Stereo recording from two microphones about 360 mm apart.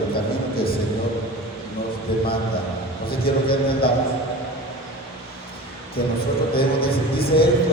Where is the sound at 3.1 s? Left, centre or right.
Left.